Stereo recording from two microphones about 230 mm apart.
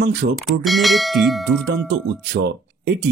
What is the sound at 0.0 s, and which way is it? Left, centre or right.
Speech, right.